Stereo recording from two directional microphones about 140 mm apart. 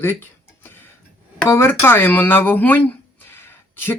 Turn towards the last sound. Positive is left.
turn(degrees=15)  # may be behind; listen again after turning